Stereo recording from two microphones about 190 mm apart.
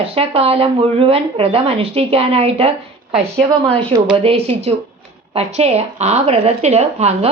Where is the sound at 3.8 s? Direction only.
25° right (ahead or behind).